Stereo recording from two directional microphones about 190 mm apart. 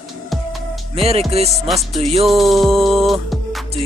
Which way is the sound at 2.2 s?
Centre (ahead or behind).